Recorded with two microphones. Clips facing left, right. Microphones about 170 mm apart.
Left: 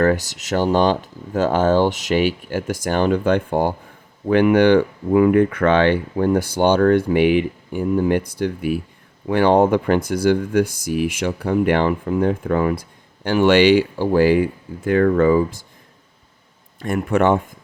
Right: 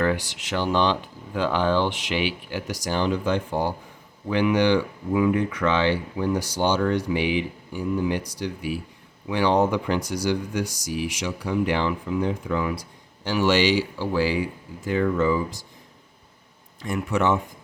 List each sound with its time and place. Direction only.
0.0 s speech: 45° left (ahead or behind)
16.8 s speech: 55° left (ahead or behind)